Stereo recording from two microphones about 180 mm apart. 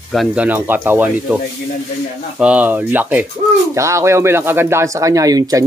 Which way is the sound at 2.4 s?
5° right (ahead or behind).